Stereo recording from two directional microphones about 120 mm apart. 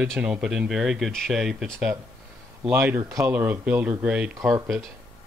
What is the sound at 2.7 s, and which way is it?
Speech, 20° right (ahead or behind).